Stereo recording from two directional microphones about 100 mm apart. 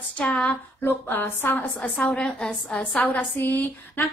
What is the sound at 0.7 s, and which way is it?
A woman's voice, 20° left (ahead or behind).